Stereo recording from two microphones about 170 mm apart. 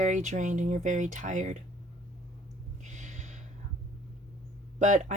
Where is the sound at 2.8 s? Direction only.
45° right (ahead or behind).